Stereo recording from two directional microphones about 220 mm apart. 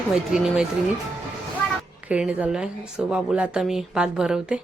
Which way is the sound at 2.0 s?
5° right (ahead or behind).